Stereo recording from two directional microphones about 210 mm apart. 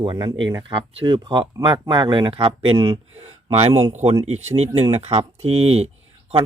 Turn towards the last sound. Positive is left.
turn(degrees=-30)  # may be behind; listen again after turning